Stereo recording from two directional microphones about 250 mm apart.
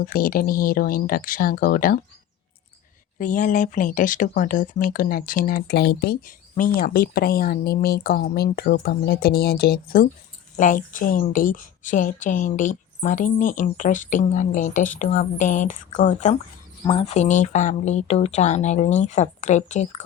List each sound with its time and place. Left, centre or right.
0.0 s speech: left
3.2 s speech: left